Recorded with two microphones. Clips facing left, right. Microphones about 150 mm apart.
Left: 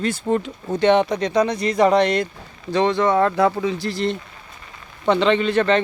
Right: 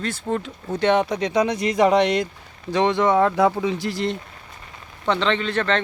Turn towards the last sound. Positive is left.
turn(degrees=5)  # may be behind; listen again after turning